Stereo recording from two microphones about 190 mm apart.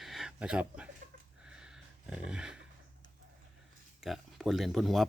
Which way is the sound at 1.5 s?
5° right (ahead or behind).